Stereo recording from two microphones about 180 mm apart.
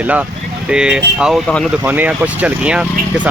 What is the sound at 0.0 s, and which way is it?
Speech, 10° right (ahead or behind).